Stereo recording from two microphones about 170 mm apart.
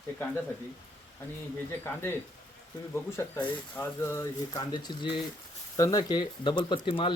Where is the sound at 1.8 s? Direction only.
15° left (ahead or behind).